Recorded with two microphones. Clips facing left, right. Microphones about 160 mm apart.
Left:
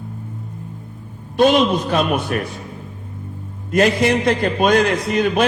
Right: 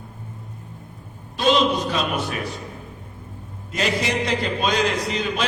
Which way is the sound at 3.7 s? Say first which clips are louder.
Left 8 dB; 55° left (ahead or behind).